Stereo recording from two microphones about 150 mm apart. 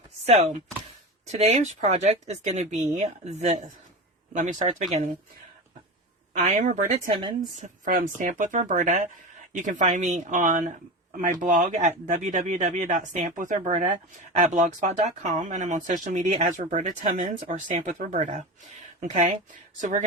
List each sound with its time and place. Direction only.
0.3 s speech: 50° right (ahead or behind)
6.3 s speech: 55° right (ahead or behind)
7.2 s a woman's voice: 30° right (ahead or behind)
7.6 s speech: 65° right (ahead or behind)